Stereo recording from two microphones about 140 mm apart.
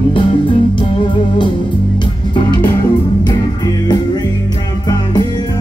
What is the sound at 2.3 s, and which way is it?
Music, 30° left (ahead or behind).